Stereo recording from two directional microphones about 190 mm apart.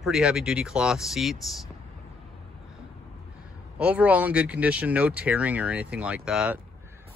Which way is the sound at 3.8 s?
10° right (ahead or behind).